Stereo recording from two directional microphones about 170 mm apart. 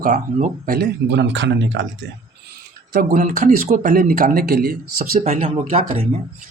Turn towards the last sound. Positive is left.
turn(degrees=-40)  # may be behind; listen again after turning